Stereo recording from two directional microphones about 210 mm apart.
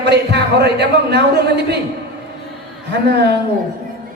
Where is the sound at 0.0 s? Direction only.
55° right (ahead or behind).